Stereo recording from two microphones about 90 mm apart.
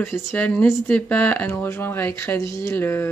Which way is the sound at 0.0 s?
30° left (ahead or behind).